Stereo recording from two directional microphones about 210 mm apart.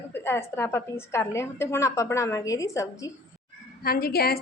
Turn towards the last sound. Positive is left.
turn(degrees=50)  # may be behind; listen again after turning